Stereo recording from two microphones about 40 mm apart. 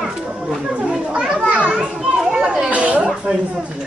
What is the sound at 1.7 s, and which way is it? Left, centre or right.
Children playing, centre.